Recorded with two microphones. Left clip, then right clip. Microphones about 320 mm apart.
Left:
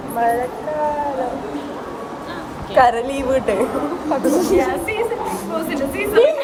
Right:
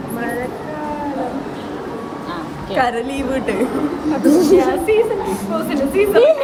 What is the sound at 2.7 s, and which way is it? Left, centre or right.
Speech, centre.